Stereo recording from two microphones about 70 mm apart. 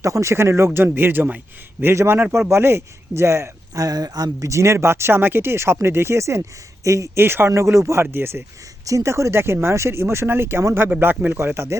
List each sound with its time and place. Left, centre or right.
0.0 s speech: right
3.8 s speech: right
4.4 s speech: right
7.2 s speech: right
7.5 s speech: right
8.9 s speech: right